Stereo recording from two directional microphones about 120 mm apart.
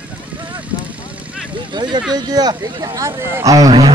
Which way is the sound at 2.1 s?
35° right (ahead or behind).